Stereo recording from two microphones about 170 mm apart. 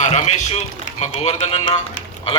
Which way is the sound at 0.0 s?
40° left (ahead or behind).